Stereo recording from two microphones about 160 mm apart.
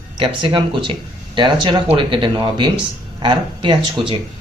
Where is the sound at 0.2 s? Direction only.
30° right (ahead or behind).